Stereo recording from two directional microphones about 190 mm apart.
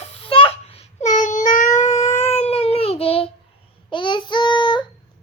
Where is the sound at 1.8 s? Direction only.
35° left (ahead or behind).